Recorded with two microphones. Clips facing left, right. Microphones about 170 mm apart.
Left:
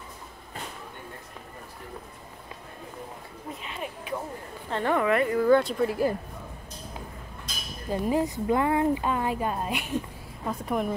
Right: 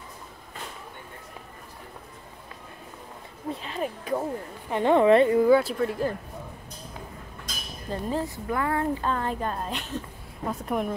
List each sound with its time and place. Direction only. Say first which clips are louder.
3.6 s a sound: right 5 dB; 35° right (ahead or behind)
4.6 s a woman's voice: right 6 dB; 20° right (ahead or behind)
5.5 s a woman's voice: right 1 dB; 5° right (ahead or behind)
7.9 s a woman's voice: left 4 dB; 10° left (ahead or behind)
10.5 s a woman's voice: even; centre (ahead or behind)